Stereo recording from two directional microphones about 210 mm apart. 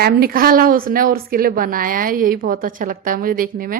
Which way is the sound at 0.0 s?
45° right (ahead or behind).